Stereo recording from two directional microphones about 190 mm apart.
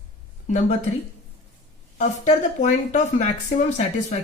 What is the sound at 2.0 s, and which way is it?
Speech, 35° left (ahead or behind).